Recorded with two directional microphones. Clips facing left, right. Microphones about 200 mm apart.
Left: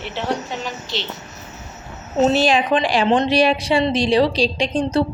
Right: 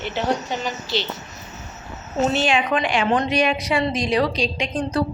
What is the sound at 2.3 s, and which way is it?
A woman's voice, 35° left (ahead or behind).